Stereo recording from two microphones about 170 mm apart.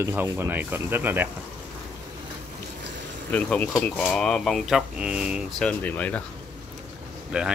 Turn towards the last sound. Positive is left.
turn(degrees=-5)  # may be behind; listen again after turning